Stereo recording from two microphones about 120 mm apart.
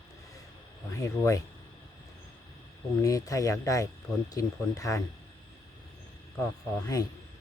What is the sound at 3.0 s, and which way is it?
Speech, 30° left (ahead or behind).